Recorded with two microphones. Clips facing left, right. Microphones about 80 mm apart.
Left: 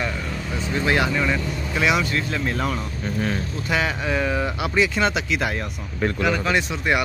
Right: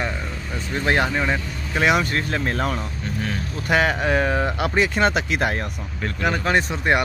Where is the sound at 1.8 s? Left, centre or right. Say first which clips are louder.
Right 2 dB; right.